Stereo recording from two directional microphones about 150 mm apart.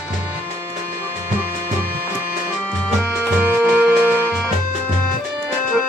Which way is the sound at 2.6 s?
10° left (ahead or behind).